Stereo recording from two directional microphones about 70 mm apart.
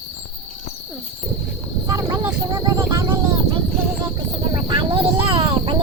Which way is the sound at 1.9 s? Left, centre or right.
Right.